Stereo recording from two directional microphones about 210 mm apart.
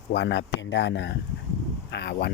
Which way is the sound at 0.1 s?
55° left (ahead or behind).